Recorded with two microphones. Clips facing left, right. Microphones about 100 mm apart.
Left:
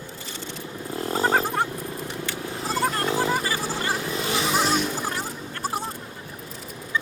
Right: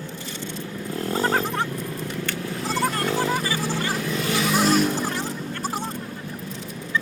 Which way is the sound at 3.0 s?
15° left (ahead or behind).